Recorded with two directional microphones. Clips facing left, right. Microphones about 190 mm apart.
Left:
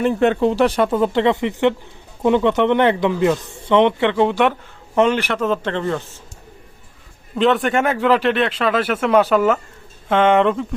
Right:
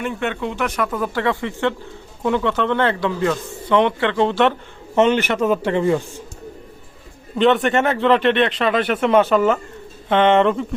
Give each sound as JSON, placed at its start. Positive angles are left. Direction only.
{"t": 0.0, "sound": "speech", "side_deg": 35}
{"t": 4.9, "sound": "a man's voice", "side_deg": 0}
{"t": 7.3, "sound": "speech", "side_deg": 0}